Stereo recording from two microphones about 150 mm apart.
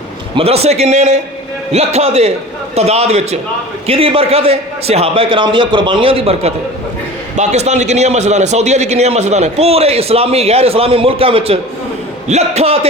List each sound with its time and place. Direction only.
0.3 s a man's voice: 40° right (ahead or behind)